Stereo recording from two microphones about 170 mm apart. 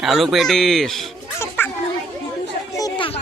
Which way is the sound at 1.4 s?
10° left (ahead or behind).